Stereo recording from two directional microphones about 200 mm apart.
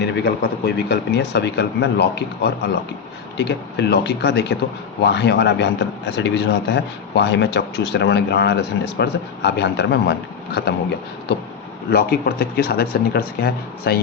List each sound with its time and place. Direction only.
0.0 s a man's voice: 60° left (ahead or behind)
11.9 s speech: 50° left (ahead or behind)